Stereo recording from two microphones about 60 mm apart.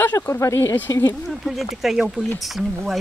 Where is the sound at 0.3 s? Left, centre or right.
Left.